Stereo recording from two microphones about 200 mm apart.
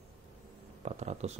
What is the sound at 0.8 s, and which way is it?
Speech, 35° right (ahead or behind).